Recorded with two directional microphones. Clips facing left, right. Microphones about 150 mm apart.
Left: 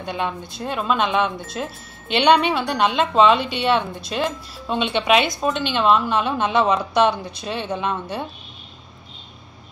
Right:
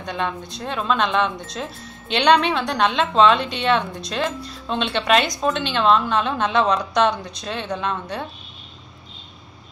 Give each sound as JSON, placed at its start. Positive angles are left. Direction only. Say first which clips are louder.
{"t": 0.0, "sound": "a woman's voice", "louder": "even", "side_deg": 10}